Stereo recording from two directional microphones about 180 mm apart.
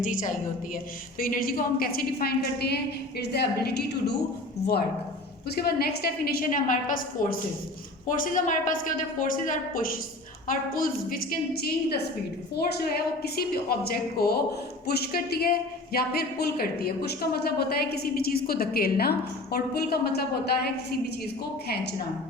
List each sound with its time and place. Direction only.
0.0 s a woman's voice: 45° left (ahead or behind); by 20.5 s 60° left (ahead or behind)